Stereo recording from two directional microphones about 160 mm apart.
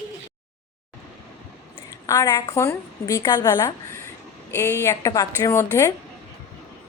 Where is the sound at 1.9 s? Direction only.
20° left (ahead or behind).